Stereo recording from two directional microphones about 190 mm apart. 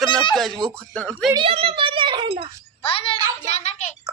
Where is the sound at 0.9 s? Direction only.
5° left (ahead or behind).